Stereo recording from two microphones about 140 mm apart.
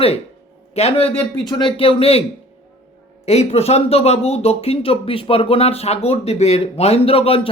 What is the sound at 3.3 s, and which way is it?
Speech, 50° left (ahead or behind).